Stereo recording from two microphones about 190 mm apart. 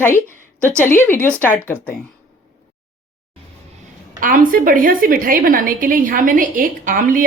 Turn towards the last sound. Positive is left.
turn(degrees=-45)  # may be behind; listen again after turning